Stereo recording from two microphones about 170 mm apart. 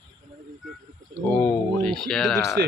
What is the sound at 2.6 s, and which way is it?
Speech, 70° right (ahead or behind).